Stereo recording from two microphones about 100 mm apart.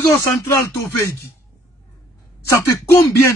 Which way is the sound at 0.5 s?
30° left (ahead or behind).